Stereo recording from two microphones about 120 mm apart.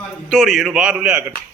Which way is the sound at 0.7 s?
10° right (ahead or behind).